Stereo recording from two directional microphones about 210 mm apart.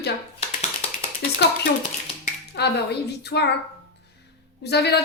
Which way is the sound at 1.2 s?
50° left (ahead or behind).